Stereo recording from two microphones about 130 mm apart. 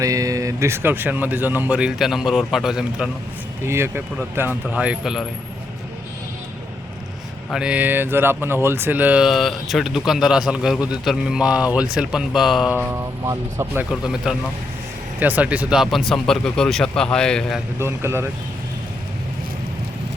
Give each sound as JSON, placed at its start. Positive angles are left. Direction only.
{"t": 0.0, "sound": "speech", "side_deg": -25}
{"t": 3.6, "sound": "speech", "side_deg": -20}
{"t": 7.5, "sound": "a man's voice", "side_deg": -10}
{"t": 12.7, "sound": "speech", "side_deg": -20}
{"t": 14.3, "sound": "a man's voice", "side_deg": -5}
{"t": 17.7, "sound": "speech", "side_deg": -20}